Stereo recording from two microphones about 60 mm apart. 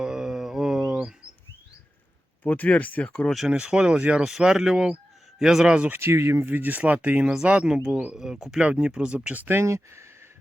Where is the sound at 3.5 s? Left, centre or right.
Centre.